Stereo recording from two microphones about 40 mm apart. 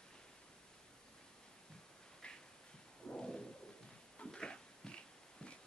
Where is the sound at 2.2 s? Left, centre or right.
Left.